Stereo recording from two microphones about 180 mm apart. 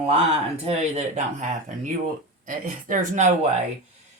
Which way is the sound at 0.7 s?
40° right (ahead or behind).